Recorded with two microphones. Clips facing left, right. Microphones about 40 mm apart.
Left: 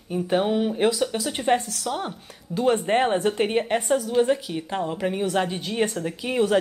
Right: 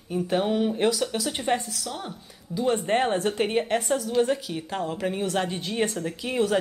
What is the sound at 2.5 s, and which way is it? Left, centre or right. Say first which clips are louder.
A woman's voice: left 3 dB; centre.